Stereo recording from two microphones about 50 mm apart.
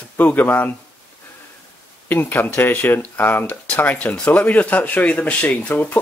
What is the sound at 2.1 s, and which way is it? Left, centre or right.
Speech, left.